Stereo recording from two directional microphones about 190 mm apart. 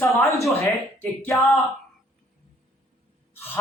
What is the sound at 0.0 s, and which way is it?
A man's voice, 15° left (ahead or behind).